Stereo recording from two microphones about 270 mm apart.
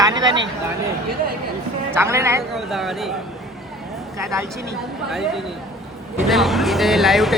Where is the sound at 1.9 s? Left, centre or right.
Centre.